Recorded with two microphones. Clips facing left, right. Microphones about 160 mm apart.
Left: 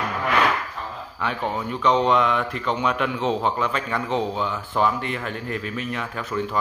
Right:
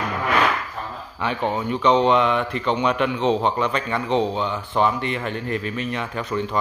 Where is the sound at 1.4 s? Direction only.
20° right (ahead or behind).